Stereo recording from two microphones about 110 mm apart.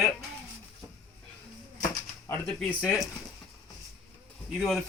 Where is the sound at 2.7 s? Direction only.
10° left (ahead or behind).